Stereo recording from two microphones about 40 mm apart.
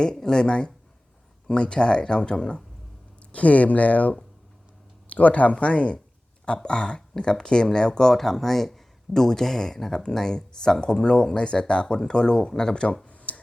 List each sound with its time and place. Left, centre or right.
0.0 s speech: centre
3.3 s speech: left; by 8.1 s centre
8.1 s speech: centre; by 13.0 s left
13.1 s a sound: left